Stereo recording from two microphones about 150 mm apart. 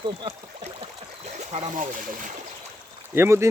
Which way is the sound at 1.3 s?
50° right (ahead or behind).